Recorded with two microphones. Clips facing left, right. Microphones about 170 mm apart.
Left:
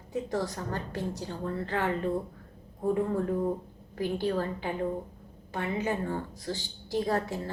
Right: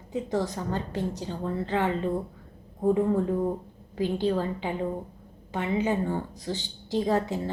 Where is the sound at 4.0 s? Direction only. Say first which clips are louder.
Right 3 dB; 20° right (ahead or behind).